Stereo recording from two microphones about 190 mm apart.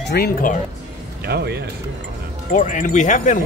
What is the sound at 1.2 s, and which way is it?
Speech, 60° right (ahead or behind).